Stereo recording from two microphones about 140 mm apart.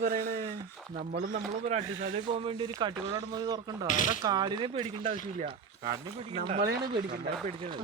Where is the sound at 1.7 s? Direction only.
50° right (ahead or behind); by 3.9 s 30° right (ahead or behind).